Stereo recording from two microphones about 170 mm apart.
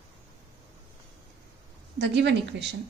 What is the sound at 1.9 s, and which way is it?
Speech, 90° right.